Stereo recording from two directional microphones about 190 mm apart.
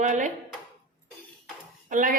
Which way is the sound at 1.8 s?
40° right (ahead or behind).